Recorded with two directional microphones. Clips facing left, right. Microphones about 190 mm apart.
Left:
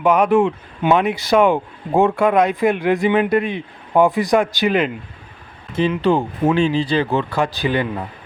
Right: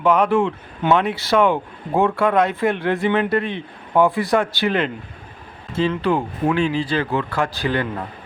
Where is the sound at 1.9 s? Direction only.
25° left (ahead or behind).